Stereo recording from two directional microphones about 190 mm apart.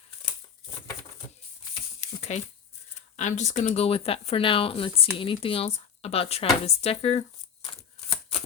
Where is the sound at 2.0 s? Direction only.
35° left (ahead or behind).